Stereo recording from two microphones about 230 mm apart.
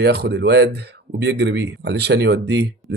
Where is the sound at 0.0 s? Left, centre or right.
Right.